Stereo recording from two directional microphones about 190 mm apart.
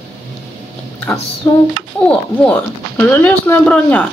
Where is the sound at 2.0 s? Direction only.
5° left (ahead or behind).